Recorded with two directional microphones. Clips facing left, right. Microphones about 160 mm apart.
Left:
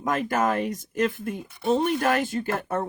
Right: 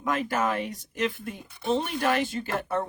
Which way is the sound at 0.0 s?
45° left (ahead or behind).